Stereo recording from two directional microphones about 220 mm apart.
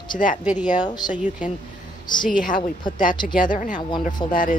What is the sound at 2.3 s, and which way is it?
Speech, 40° left (ahead or behind).